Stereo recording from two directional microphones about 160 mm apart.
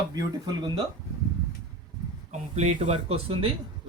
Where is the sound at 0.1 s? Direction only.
25° right (ahead or behind).